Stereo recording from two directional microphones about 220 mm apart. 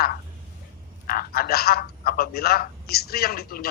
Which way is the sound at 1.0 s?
40° left (ahead or behind).